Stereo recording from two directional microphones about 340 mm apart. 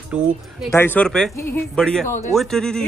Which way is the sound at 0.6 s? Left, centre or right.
Centre.